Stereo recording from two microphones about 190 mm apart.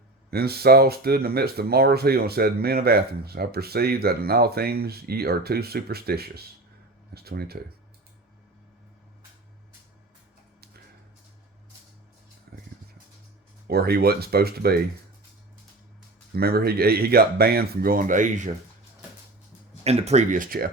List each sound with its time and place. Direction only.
0.3 s speech: 55° right (ahead or behind)
12.5 s music: 55° right (ahead or behind)
13.7 s speech: 55° right (ahead or behind)
16.3 s speech: 55° right (ahead or behind)
19.8 s speech: 35° right (ahead or behind)